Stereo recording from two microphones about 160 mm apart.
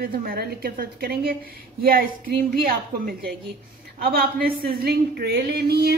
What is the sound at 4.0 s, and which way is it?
Speech, 70° right (ahead or behind).